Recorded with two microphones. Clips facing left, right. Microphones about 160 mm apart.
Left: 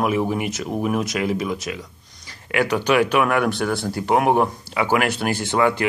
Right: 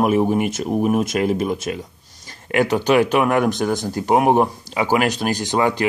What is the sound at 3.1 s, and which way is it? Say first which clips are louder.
Speech: right 2 dB; 35° right (ahead or behind).